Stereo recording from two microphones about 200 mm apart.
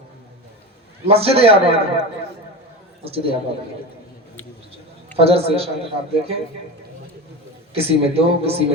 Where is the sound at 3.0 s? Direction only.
30° right (ahead or behind).